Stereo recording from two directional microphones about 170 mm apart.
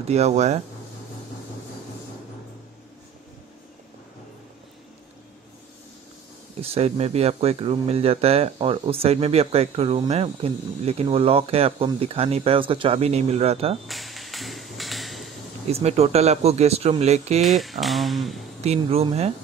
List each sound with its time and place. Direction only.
0.0 s speech: 40° right (ahead or behind)
6.6 s speech: 35° right (ahead or behind)
13.8 s a sound: centre (ahead or behind)
15.7 s speech: 40° right (ahead or behind)
17.4 s speech: centre (ahead or behind)
18.6 s speech: 35° right (ahead or behind)